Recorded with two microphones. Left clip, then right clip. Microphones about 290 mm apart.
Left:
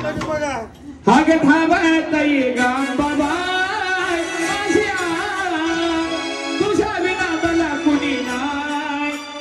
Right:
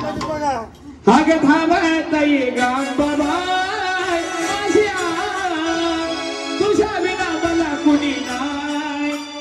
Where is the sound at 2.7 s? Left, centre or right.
Right.